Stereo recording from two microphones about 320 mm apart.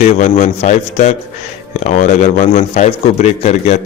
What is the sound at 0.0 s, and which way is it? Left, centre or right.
Speech, centre.